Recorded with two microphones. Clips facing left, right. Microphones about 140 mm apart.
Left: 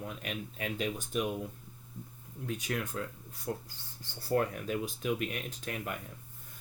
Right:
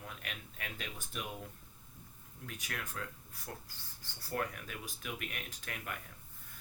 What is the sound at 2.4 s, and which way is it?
Speech, 25° left (ahead or behind).